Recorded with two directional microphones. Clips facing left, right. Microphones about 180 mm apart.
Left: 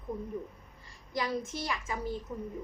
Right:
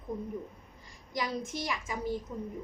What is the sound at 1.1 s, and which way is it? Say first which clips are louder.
Speech: left 1 dB; 15° right (ahead or behind).